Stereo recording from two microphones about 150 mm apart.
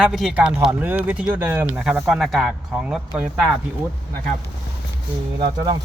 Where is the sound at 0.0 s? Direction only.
Centre (ahead or behind).